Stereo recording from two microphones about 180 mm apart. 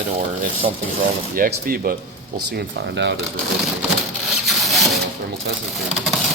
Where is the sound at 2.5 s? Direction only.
75° right (ahead or behind).